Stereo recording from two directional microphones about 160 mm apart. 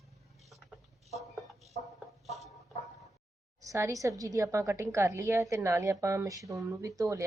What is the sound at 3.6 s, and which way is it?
A woman's voice, 20° right (ahead or behind).